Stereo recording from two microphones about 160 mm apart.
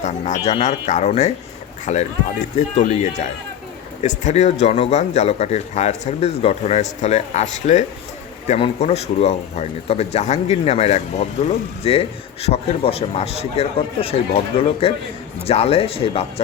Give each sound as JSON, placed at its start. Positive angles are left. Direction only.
{"t": 0.0, "sound": "speech", "side_deg": 45}